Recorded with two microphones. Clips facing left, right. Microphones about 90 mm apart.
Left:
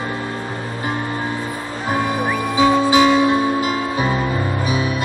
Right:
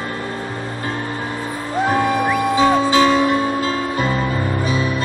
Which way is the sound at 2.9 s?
15° left (ahead or behind).